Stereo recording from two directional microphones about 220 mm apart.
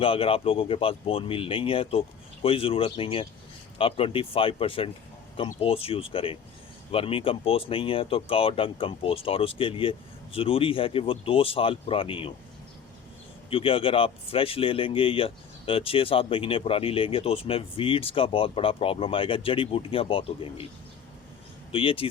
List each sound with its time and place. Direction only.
0.0 s speech: 25° left (ahead or behind)
13.5 s speech: 25° left (ahead or behind)
21.7 s speech: 25° left (ahead or behind)